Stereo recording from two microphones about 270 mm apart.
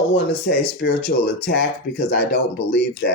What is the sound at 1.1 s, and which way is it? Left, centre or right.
Speech, left.